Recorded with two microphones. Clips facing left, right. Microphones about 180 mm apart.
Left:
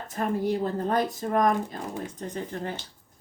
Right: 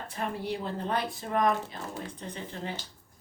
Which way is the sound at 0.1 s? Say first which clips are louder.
Left 8 dB; 45° left (ahead or behind).